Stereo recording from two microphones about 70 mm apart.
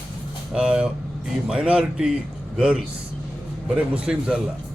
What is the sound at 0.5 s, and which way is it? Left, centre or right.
Speech, centre.